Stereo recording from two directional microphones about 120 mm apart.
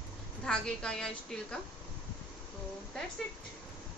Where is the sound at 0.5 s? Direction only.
5° left (ahead or behind).